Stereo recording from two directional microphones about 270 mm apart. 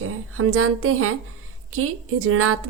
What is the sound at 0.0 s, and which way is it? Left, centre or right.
A woman's voice, right.